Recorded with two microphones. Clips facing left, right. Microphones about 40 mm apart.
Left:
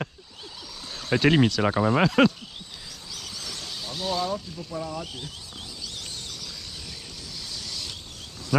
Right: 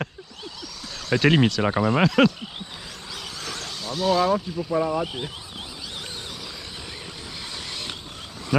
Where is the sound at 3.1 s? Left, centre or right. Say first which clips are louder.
Right 4 dB; right.